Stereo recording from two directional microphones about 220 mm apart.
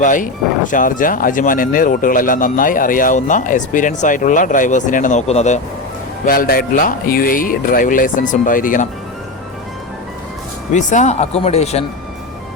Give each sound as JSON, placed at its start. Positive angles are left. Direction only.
{"t": 0.0, "sound": "speech", "side_deg": 35}
{"t": 10.8, "sound": "speech", "side_deg": 35}